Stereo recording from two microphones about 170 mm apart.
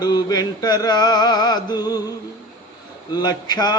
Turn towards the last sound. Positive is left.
turn(degrees=25)  # may be behind; listen again after turning